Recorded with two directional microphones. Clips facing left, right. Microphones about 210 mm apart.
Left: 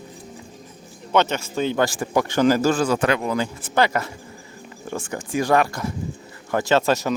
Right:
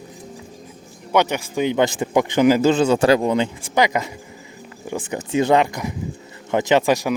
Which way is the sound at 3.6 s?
15° right (ahead or behind).